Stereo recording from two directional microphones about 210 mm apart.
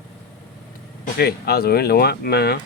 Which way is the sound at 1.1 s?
50° left (ahead or behind).